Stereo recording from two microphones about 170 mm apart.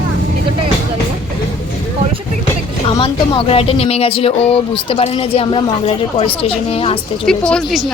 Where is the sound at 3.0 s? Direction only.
30° left (ahead or behind).